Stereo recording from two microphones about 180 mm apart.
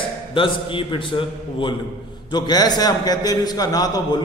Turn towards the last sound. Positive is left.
turn(degrees=20)  # may be behind; listen again after turning